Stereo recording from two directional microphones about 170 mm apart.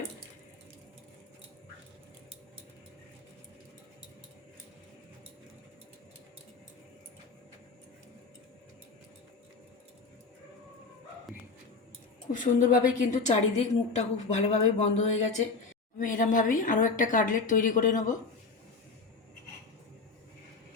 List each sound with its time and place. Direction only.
12.3 s a woman's voice: 50° left (ahead or behind)